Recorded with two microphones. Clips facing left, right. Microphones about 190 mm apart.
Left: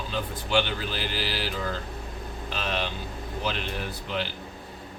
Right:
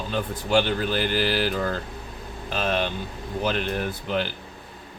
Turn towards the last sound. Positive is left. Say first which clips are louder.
# right 5 dB
turn(degrees=-50)  # may be behind; listen again after turning